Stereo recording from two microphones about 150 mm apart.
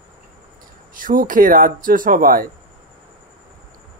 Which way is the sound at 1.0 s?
65° right (ahead or behind).